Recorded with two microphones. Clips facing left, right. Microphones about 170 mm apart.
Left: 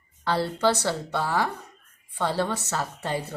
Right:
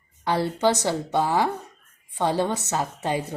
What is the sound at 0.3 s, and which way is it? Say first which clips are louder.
Speech: right 2 dB; 15° right (ahead or behind).